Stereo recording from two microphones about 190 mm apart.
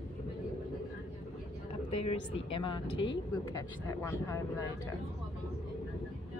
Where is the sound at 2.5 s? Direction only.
25° left (ahead or behind).